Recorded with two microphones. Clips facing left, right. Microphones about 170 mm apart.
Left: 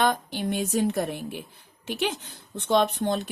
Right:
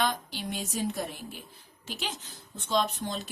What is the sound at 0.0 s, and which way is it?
Speech, 55° left (ahead or behind).